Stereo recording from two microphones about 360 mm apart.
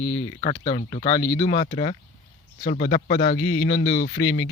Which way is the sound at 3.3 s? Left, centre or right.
Left.